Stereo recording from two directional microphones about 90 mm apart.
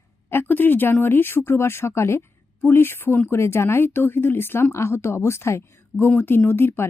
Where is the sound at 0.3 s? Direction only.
25° left (ahead or behind).